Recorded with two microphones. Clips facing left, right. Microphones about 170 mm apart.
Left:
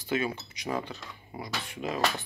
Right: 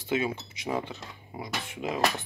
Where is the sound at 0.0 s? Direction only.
20° right (ahead or behind).